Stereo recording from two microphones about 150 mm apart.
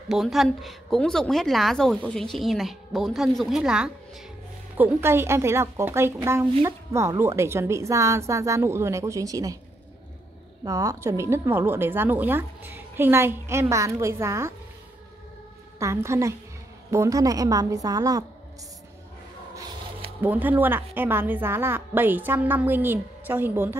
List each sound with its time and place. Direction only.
0.1 s a woman's voice: centre (ahead or behind); by 9.6 s 25° right (ahead or behind)
10.6 s a woman's voice: 20° right (ahead or behind)
15.8 s a woman's voice: 20° right (ahead or behind)
20.2 s a woman's voice: 10° right (ahead or behind)